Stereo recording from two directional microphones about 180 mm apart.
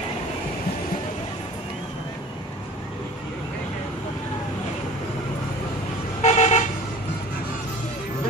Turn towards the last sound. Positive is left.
turn(degrees=40)  # may be behind; listen again after turning